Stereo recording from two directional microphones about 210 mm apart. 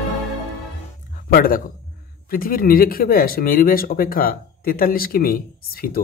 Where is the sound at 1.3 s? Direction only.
45° left (ahead or behind).